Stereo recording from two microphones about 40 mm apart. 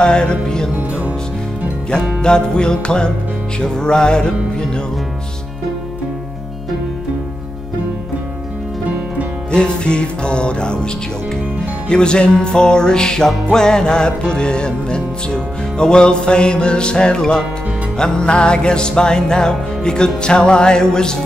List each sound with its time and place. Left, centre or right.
0.0 s music: left
2.2 s music: left
9.5 s music: left
11.9 s music: left